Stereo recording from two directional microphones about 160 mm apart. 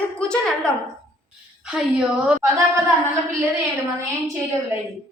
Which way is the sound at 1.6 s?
5° right (ahead or behind).